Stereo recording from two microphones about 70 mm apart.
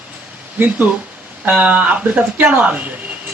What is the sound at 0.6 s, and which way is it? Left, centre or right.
Speech, right.